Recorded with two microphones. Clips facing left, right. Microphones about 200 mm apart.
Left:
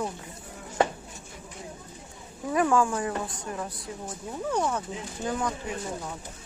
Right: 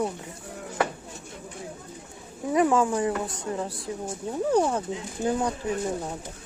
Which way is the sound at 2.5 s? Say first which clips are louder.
Right 2 dB; 20° right (ahead or behind).